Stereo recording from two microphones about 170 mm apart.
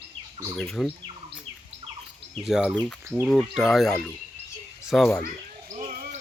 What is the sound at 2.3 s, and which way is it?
Speech, centre (ahead or behind).